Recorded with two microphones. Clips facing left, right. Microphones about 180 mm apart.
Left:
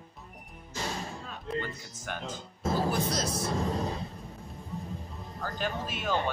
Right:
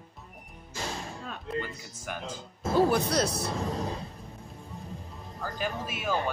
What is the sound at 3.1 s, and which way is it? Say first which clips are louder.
Speech: right 4 dB; 65° right (ahead or behind).